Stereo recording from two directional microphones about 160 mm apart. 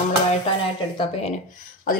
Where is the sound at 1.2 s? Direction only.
50° left (ahead or behind).